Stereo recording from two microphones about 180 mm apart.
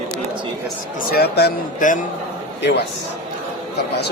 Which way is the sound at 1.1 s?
65° left (ahead or behind).